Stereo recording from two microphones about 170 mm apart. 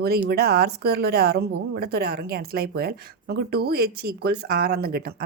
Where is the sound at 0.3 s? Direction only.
65° right (ahead or behind).